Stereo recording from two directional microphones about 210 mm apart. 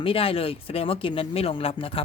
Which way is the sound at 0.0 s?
25° left (ahead or behind).